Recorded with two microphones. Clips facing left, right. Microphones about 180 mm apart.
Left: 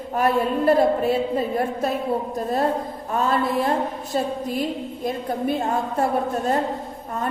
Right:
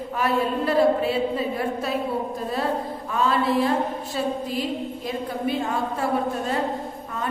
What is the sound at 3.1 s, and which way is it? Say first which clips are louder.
Speech: even; 45° left (ahead or behind).